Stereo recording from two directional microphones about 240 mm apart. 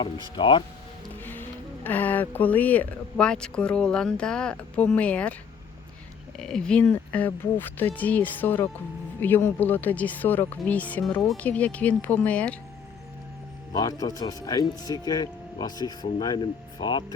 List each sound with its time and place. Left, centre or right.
0.0 s speech: centre
1.2 s speech: centre
6.3 s speech: centre
13.7 s speech: centre